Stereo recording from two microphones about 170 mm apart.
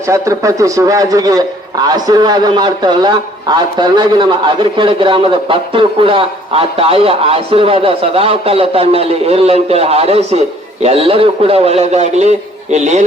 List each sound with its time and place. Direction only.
0.1 s a man's voice: 20° right (ahead or behind); by 13.1 s 45° right (ahead or behind)